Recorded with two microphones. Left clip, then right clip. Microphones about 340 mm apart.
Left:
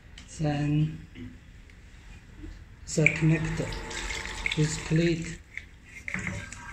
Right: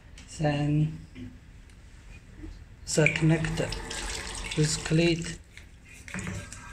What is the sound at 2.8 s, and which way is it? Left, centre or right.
Speech, right.